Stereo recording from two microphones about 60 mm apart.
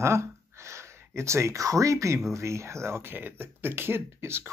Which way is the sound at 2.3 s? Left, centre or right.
Right.